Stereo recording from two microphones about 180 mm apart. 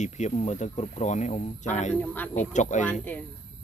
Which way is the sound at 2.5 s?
40° left (ahead or behind).